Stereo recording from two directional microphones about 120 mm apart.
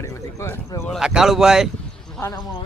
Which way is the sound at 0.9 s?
5° right (ahead or behind).